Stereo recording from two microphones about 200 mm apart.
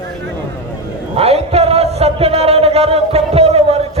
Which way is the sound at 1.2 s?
30° right (ahead or behind).